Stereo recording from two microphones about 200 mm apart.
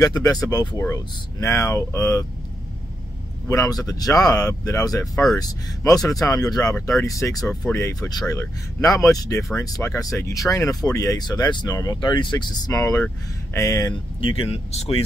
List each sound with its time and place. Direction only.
0.0 s speech: 20° left (ahead or behind)
3.4 s speech: 15° left (ahead or behind)
14.5 s speech: 30° left (ahead or behind)